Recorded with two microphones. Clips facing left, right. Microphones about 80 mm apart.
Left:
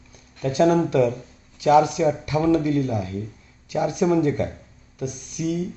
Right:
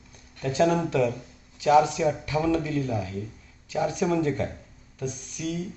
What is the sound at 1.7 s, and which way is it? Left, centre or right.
Speech, centre.